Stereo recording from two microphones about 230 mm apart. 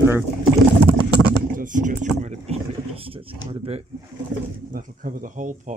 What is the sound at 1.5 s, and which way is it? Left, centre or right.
Speech, right.